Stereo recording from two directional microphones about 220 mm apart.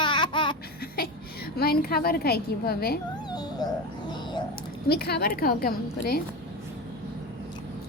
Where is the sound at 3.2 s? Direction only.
20° left (ahead or behind).